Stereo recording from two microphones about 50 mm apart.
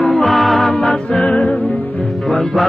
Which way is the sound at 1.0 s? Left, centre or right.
Centre.